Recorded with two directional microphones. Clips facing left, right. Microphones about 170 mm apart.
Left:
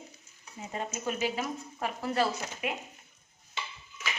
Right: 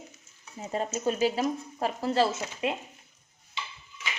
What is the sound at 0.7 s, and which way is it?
Speech, 35° right (ahead or behind).